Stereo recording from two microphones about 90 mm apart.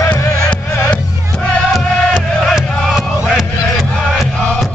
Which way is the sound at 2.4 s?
Centre (ahead or behind).